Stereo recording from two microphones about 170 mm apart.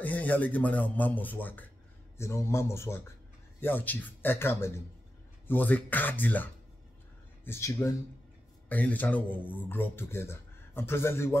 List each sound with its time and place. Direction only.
0.0 s speech: 10° left (ahead or behind)